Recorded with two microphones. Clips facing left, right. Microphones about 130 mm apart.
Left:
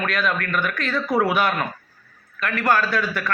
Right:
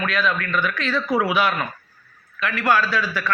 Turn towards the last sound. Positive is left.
turn(degrees=50)  # may be behind; listen again after turning